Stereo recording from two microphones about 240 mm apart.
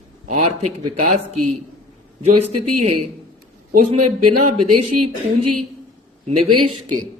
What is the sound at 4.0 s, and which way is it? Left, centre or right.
Music, right.